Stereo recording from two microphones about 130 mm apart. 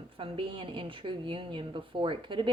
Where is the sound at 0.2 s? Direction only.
40° right (ahead or behind).